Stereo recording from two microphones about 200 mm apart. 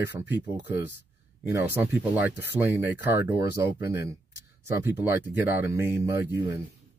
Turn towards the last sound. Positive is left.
turn(degrees=-15)  # may be behind; listen again after turning